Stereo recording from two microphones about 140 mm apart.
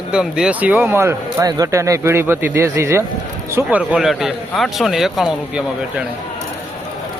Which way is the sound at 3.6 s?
5° right (ahead or behind).